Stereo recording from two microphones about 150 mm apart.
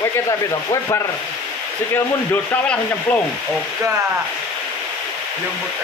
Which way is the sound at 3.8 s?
15° right (ahead or behind).